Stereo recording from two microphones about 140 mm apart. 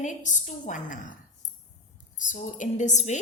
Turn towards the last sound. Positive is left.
turn(degrees=60)  # may be behind; listen again after turning